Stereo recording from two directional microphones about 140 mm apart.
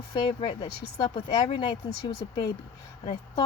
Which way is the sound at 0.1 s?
40° left (ahead or behind).